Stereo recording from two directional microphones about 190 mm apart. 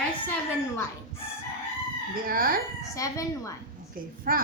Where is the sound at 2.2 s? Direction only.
50° right (ahead or behind).